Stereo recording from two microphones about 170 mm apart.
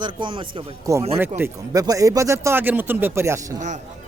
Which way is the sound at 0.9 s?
15° right (ahead or behind).